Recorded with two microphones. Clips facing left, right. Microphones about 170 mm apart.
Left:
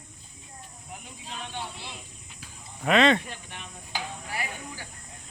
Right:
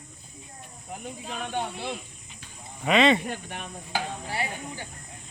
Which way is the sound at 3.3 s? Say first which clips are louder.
Right 7 dB; 55° right (ahead or behind).